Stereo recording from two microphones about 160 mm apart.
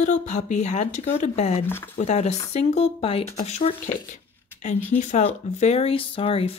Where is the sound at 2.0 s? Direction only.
45° left (ahead or behind).